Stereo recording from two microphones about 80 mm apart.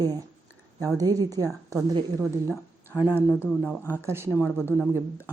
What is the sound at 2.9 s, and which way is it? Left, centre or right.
Speech, right.